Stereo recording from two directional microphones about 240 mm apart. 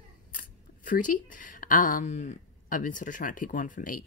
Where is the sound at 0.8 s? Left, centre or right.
Left.